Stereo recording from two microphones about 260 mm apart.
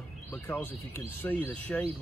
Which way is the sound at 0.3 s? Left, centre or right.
Centre.